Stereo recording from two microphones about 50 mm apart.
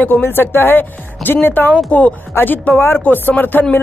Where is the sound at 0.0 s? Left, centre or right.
Left.